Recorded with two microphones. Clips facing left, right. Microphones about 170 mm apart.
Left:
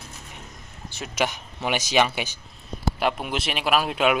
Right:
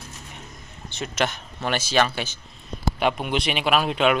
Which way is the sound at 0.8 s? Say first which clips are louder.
Right 1 dB; 5° left (ahead or behind).